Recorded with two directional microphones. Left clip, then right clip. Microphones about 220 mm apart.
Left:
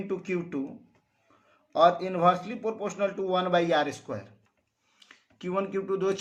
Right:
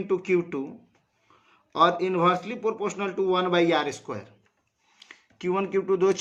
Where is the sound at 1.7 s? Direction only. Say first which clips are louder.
Right 1 dB; 40° right (ahead or behind).